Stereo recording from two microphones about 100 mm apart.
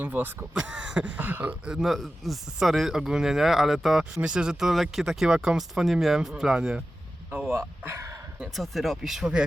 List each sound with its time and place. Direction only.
0.0 s speech: 15° right (ahead or behind)
7.9 s speech: 30° right (ahead or behind)
8.4 s speech: centre (ahead or behind)